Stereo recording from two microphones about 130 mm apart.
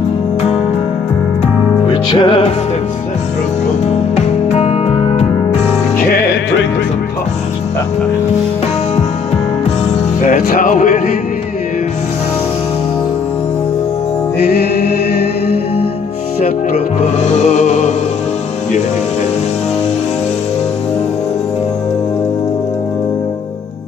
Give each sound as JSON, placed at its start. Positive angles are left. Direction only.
{"t": 2.0, "sound": "music", "side_deg": 40}
{"t": 3.8, "sound": "music", "side_deg": 60}
{"t": 10.2, "sound": "music", "side_deg": 90}
{"t": 16.7, "sound": "music", "side_deg": 55}